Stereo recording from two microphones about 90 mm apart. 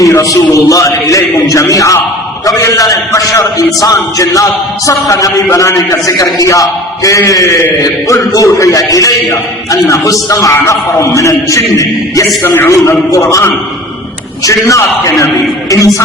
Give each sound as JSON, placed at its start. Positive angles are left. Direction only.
{"t": 0.0, "sound": "a man's voice", "side_deg": 40}